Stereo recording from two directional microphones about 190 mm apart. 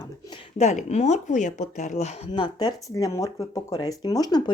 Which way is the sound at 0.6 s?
35° left (ahead or behind).